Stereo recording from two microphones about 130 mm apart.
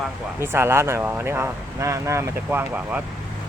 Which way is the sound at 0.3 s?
20° right (ahead or behind).